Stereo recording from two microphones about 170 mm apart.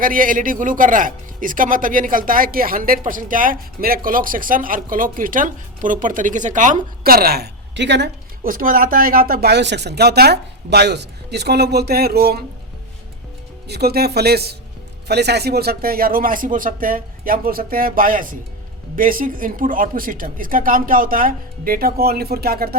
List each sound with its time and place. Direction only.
0.0 s a man's voice: 55° right (ahead or behind); by 8.1 s 90° right
8.4 s speech: 55° right (ahead or behind)
13.7 s speech: 70° right (ahead or behind)